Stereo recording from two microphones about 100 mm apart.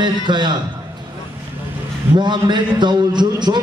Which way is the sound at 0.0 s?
50° right (ahead or behind).